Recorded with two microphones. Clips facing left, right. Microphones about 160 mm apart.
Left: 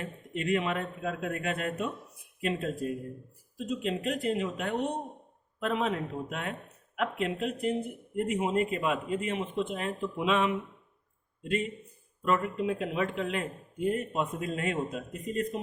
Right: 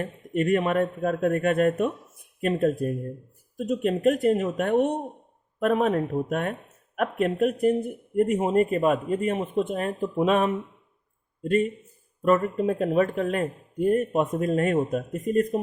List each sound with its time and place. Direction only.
0.0 s speech: 50° right (ahead or behind)